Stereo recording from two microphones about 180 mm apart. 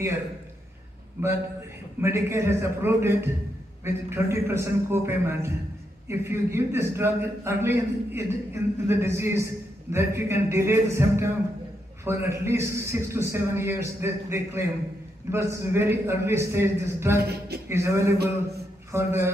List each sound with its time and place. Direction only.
2.0 s a man's voice: 15° right (ahead or behind)
17.2 s speech: 60° right (ahead or behind)
17.6 s a man's voice: 15° right (ahead or behind)
18.1 s a man's voice: 65° right (ahead or behind)
18.9 s speech: 15° right (ahead or behind)